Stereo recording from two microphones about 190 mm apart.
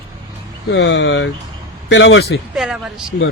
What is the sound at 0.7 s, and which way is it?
Speech, 70° left (ahead or behind).